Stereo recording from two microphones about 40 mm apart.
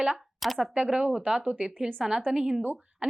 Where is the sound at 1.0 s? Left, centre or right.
Right.